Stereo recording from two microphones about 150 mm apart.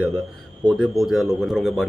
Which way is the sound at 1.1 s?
Centre (ahead or behind).